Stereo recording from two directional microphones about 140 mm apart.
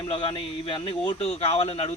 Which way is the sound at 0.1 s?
40° left (ahead or behind).